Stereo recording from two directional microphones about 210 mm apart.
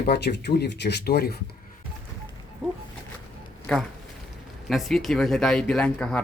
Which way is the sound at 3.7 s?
5° left (ahead or behind).